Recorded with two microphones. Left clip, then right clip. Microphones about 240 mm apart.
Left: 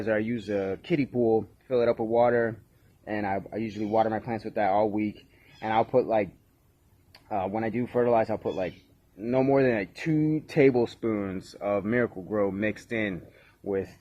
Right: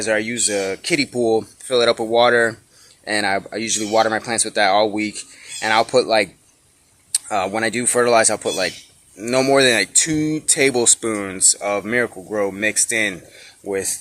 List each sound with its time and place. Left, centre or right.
0.0 s speech: centre